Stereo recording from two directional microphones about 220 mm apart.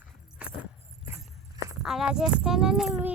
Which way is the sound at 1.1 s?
15° right (ahead or behind).